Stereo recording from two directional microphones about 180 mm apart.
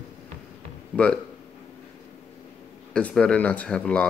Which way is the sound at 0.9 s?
5° left (ahead or behind).